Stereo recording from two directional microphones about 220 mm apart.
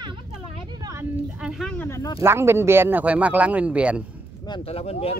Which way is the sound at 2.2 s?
10° right (ahead or behind).